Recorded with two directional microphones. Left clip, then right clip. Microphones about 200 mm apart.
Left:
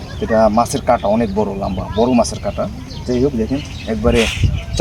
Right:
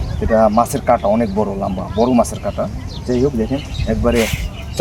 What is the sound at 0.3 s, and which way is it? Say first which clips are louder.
Speech: even; 5° right (ahead or behind).